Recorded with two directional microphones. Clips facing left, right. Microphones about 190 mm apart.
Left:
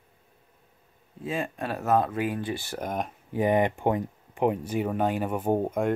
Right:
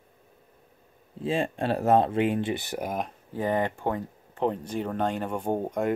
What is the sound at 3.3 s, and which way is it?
Speech, 15° left (ahead or behind).